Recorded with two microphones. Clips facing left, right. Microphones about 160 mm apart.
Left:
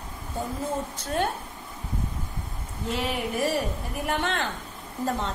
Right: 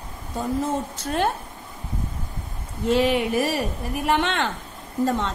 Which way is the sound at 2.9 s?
90° right.